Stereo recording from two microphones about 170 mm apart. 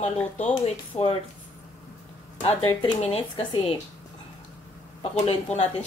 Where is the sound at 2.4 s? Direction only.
30° left (ahead or behind).